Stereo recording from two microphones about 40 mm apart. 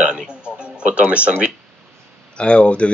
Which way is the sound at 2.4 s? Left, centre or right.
Left.